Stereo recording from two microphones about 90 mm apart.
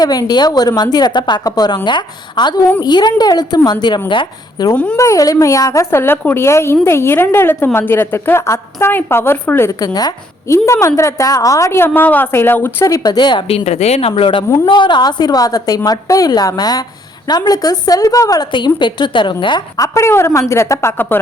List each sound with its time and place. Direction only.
0.0 s a woman's voice: 50° left (ahead or behind)
4.1 s a woman's voice: 65° left (ahead or behind)
4.7 s a woman's voice: 15° left (ahead or behind)
4.9 s a woman's voice: 40° left (ahead or behind)
9.7 s a woman's voice: 45° left (ahead or behind)
10.5 s a woman's voice: 30° left (ahead or behind)
12.8 s a woman's voice: 40° left (ahead or behind)
14.0 s speech: 85° left
14.7 s a woman's voice: 60° left (ahead or behind); by 18.4 s 40° left (ahead or behind)
18.5 s a woman's voice: 60° left (ahead or behind)
19.8 s a woman's voice: 35° left (ahead or behind)